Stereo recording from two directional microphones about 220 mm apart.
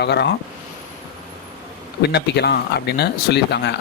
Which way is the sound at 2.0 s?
50° left (ahead or behind).